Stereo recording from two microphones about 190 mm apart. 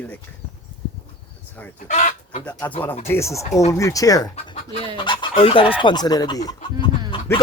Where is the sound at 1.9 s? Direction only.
40° left (ahead or behind).